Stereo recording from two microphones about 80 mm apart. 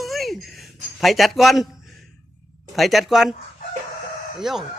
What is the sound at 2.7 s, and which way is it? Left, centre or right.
Speech, centre.